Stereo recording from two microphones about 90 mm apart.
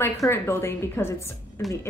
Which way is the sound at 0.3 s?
30° left (ahead or behind).